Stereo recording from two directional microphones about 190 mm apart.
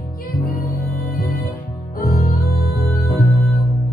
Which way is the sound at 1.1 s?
50° left (ahead or behind).